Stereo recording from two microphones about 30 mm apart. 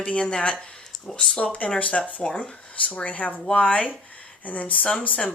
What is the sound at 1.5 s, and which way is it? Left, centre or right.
A woman's voice, left.